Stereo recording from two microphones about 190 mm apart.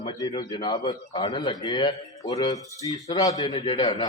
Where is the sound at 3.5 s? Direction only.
30° left (ahead or behind).